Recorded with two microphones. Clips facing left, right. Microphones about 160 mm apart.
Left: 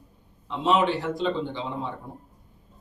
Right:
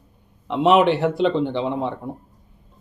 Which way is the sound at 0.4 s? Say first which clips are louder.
Right 7 dB; 70° right (ahead or behind).